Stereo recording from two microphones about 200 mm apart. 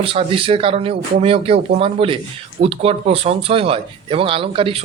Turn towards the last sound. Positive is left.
turn(degrees=-25)  # may be behind; listen again after turning